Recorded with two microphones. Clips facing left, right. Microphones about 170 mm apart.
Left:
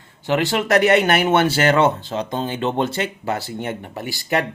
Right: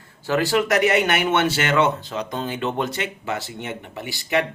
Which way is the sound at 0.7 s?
35° left (ahead or behind).